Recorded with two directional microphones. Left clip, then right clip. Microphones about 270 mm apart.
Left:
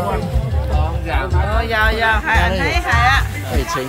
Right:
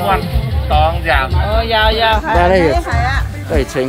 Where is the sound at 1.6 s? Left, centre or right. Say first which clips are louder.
Right 4 dB; right.